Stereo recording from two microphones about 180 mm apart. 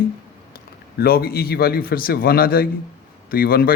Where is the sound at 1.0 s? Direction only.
60° left (ahead or behind).